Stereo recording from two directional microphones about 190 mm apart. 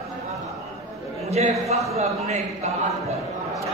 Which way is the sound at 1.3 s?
35° right (ahead or behind).